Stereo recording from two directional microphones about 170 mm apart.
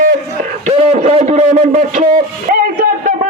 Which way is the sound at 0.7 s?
35° right (ahead or behind).